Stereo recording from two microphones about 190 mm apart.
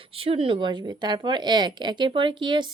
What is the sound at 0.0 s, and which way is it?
A woman's voice, 30° right (ahead or behind).